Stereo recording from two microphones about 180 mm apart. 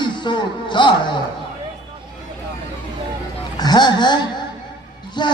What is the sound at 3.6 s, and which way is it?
Speech, 25° left (ahead or behind).